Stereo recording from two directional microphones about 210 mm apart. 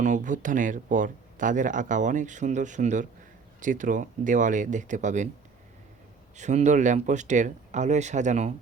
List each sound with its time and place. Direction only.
0.0 s speech: 35° right (ahead or behind)
6.3 s speech: 35° right (ahead or behind)